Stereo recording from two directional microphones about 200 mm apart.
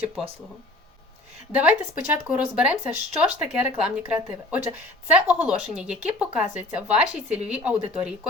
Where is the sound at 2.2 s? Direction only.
5° right (ahead or behind).